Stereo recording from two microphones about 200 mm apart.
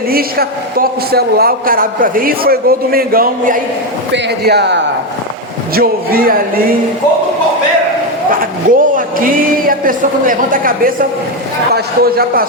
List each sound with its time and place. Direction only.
0.1 s a man's voice: 50° right (ahead or behind)
4.1 s a man's voice: 55° right (ahead or behind)
8.7 s a man's voice: 40° right (ahead or behind)